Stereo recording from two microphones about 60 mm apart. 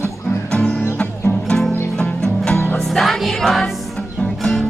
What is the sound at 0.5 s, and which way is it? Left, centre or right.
Music, centre.